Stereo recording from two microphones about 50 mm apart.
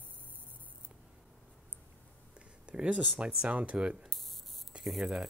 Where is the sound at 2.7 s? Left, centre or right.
Right.